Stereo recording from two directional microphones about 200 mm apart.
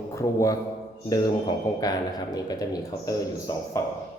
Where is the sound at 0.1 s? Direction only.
15° left (ahead or behind).